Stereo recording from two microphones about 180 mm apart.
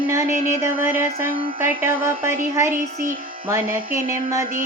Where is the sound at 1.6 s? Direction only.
10° right (ahead or behind).